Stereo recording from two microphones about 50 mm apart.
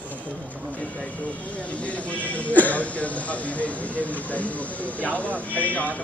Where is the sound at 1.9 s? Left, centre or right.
Left.